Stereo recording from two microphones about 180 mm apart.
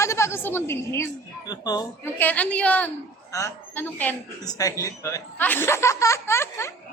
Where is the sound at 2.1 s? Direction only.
10° left (ahead or behind).